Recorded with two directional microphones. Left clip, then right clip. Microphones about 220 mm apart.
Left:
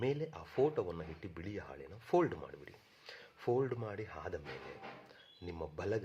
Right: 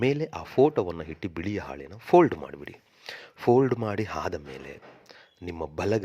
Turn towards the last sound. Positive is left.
turn(degrees=-35)  # may be behind; listen again after turning